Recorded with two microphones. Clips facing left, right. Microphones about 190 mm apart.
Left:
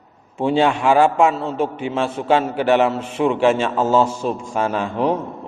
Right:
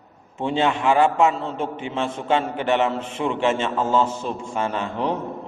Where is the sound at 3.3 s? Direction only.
25° right (ahead or behind).